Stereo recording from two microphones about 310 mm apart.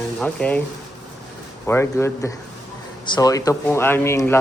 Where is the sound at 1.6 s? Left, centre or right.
Centre.